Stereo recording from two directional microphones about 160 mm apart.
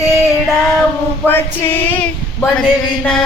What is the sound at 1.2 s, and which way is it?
Speech, 15° left (ahead or behind).